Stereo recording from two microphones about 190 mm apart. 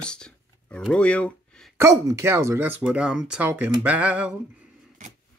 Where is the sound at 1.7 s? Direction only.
15° right (ahead or behind).